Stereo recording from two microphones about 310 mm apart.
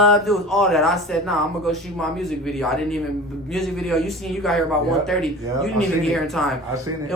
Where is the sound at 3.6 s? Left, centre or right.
Centre.